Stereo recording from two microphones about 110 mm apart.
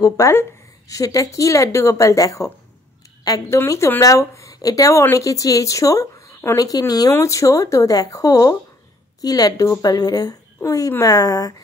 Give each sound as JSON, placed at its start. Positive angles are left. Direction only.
{"t": 0.0, "sound": "a woman's voice", "side_deg": 25}